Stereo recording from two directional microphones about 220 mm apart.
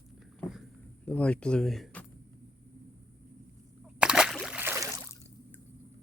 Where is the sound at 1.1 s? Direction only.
5° left (ahead or behind).